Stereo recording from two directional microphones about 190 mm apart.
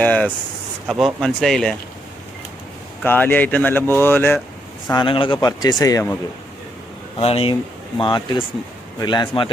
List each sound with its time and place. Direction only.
0.0 s speech: 10° left (ahead or behind)
3.0 s speech: 10° left (ahead or behind)
4.9 s speech: 25° left (ahead or behind)
7.2 s speech: 30° left (ahead or behind)